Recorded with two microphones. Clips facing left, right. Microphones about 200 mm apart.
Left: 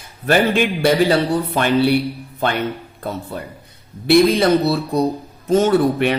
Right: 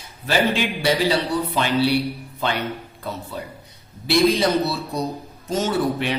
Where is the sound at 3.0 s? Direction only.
50° left (ahead or behind).